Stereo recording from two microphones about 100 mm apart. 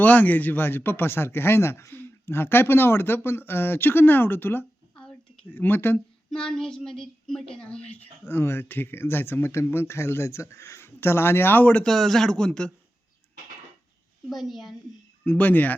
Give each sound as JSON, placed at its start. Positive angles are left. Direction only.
{"t": 0.0, "sound": "a woman's voice", "side_deg": 15}
{"t": 4.9, "sound": "a sound", "side_deg": 10}
{"t": 5.5, "sound": "a woman's voice", "side_deg": 20}
{"t": 6.3, "sound": "a woman's voice", "side_deg": 5}
{"t": 14.3, "sound": "a woman's voice", "side_deg": 0}
{"t": 15.2, "sound": "speech", "side_deg": 15}